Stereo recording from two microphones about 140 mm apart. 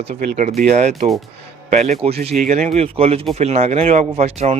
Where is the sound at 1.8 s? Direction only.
50° right (ahead or behind).